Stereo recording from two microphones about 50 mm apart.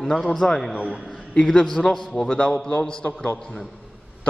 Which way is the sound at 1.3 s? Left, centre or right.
Centre.